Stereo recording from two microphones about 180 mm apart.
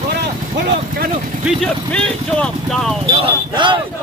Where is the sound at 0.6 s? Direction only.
60° right (ahead or behind).